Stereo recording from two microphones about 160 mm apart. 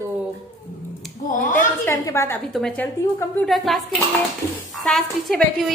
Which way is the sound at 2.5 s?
5° left (ahead or behind).